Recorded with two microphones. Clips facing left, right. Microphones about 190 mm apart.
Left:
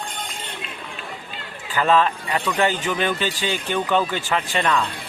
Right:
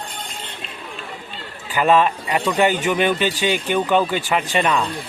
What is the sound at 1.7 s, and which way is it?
Speech, 15° right (ahead or behind).